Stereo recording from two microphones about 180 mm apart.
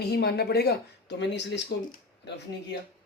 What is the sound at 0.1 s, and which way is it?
Speech, 65° left (ahead or behind).